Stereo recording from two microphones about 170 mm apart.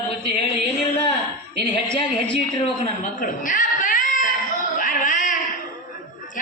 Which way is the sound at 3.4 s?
50° left (ahead or behind).